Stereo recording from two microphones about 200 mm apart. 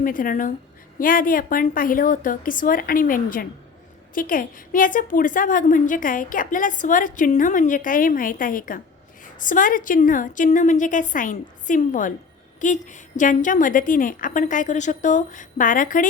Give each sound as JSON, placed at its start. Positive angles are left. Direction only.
{"t": 0.0, "sound": "a woman's voice", "side_deg": 45}